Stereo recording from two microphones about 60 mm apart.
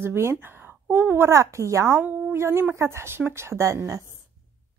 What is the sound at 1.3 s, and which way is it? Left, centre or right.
Speech, right.